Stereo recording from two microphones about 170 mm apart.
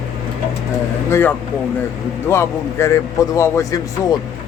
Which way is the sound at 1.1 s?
15° left (ahead or behind).